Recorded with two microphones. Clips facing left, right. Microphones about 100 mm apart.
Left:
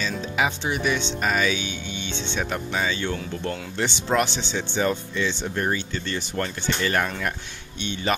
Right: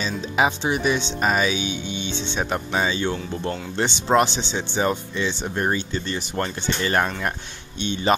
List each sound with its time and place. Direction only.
0.0 s speech: 20° right (ahead or behind)